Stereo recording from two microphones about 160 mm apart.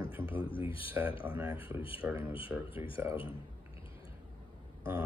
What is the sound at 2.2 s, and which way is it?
A man's voice, 35° left (ahead or behind).